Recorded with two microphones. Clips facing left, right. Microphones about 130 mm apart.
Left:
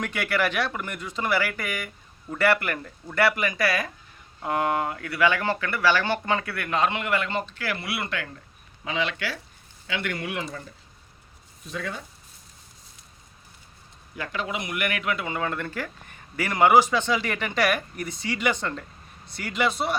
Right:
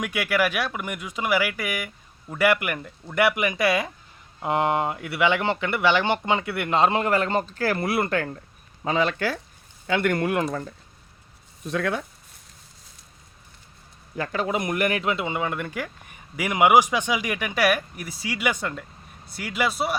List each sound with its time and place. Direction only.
0.0 s speech: 10° right (ahead or behind); by 10.8 s 50° right (ahead or behind)
11.6 s speech: 60° right (ahead or behind)
14.2 s speech: 40° right (ahead or behind); by 20.0 s 5° right (ahead or behind)